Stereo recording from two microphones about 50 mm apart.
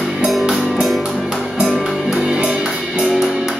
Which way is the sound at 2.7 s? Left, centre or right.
Centre.